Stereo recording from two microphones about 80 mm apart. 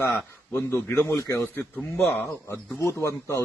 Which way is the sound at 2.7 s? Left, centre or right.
Left.